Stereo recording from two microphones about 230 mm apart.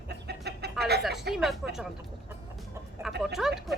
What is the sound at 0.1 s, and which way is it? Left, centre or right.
Chicken, right.